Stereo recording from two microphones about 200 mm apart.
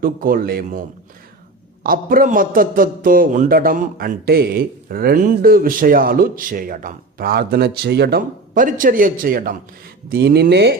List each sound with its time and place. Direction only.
0.0 s a man's voice: 45° right (ahead or behind)